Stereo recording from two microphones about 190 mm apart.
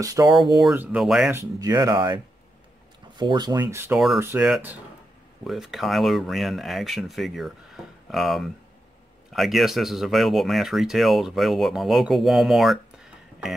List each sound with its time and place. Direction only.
0.0 s speech: 20° right (ahead or behind)
0.6 s speech: 5° right (ahead or behind)
1.3 s speech: 15° right (ahead or behind)
3.2 s speech: 25° right (ahead or behind); by 13.6 s centre (ahead or behind)